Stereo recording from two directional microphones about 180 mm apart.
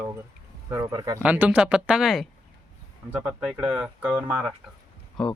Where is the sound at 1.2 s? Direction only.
10° right (ahead or behind).